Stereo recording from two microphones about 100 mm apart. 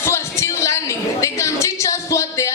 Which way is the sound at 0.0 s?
25° left (ahead or behind).